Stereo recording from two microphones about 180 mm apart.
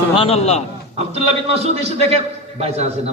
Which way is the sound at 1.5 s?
35° right (ahead or behind).